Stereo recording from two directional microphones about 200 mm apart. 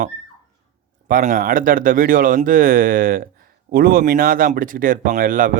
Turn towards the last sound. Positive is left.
turn(degrees=-45)  # may be behind; listen again after turning